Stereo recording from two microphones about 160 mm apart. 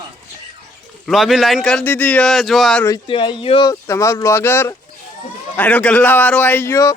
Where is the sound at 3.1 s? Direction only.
30° left (ahead or behind).